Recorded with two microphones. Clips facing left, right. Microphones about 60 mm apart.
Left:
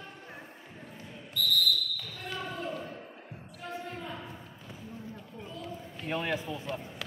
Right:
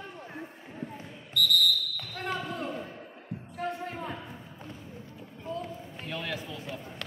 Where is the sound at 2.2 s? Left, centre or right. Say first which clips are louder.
Right 5 dB; right.